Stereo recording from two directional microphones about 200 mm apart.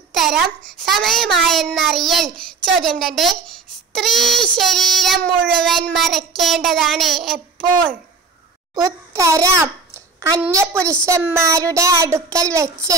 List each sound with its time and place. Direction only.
0.1 s a sound: centre (ahead or behind)
0.8 s child singing: centre (ahead or behind)
8.7 s a child's voice: 15° right (ahead or behind)